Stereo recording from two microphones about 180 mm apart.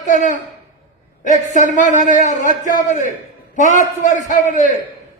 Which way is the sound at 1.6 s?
45° right (ahead or behind).